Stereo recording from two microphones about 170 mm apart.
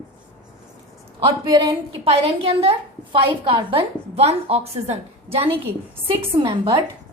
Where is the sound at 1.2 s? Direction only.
25° right (ahead or behind).